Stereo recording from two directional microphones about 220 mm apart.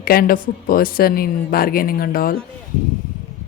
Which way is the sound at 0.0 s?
45° left (ahead or behind).